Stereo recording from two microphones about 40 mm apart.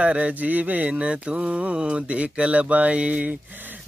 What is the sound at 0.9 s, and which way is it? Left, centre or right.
Speech, right.